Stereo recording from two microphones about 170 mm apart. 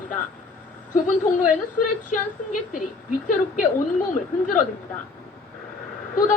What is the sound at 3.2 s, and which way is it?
Speech, 50° left (ahead or behind).